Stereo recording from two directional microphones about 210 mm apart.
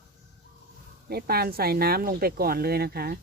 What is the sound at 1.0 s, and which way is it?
Speech, 45° right (ahead or behind).